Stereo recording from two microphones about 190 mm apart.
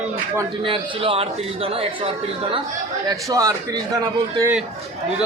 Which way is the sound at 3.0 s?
15° right (ahead or behind).